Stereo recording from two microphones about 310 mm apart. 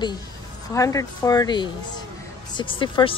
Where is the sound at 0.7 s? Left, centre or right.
Centre.